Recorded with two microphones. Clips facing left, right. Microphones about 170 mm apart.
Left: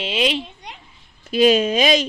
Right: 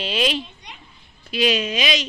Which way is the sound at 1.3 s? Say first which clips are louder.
Left 7 dB; 45° left (ahead or behind).